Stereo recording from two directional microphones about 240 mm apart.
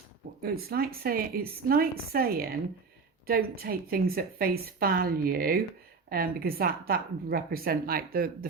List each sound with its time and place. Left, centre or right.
0.4 s a woman's voice: right